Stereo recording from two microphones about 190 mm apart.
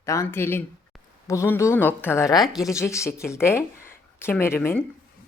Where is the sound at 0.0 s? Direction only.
15° left (ahead or behind).